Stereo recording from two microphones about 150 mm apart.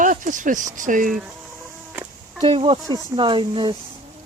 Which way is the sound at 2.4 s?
40° right (ahead or behind).